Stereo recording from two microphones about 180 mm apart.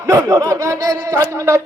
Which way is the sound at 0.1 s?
15° right (ahead or behind).